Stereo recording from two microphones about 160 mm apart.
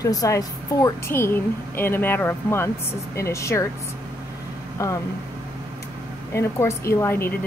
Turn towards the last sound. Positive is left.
turn(degrees=15)  # may be behind; listen again after turning